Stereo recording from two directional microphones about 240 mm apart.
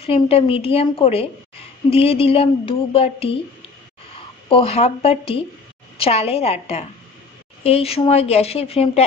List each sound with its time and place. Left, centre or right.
0.0 s speech: left
4.5 s speech: left